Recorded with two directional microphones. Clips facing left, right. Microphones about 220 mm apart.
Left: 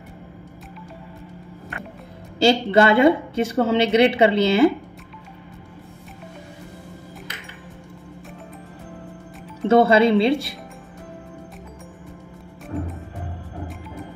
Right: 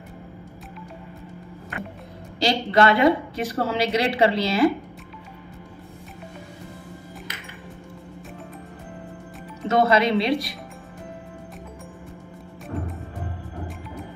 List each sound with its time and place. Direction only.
2.4 s a woman's voice: 30° left (ahead or behind)
9.7 s a woman's voice: 30° left (ahead or behind)